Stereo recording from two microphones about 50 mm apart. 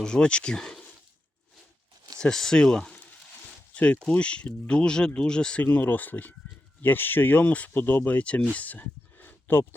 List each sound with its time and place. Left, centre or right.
0.0 s speech: centre
2.2 s speech: centre
3.7 s a sound: left
4.1 s speech: left
5.6 s speech: left
7.7 s speech: left
8.5 s a sound: left